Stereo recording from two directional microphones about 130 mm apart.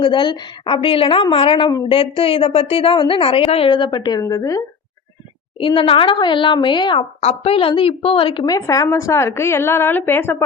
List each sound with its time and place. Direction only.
0.0 s a woman's voice: 35° left (ahead or behind)
5.5 s a woman's voice: 40° left (ahead or behind)
7.2 s a woman's voice: 50° left (ahead or behind)
8.4 s a woman's voice: 25° left (ahead or behind)